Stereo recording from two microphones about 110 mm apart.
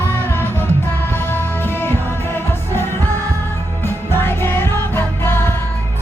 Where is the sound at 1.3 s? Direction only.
20° left (ahead or behind).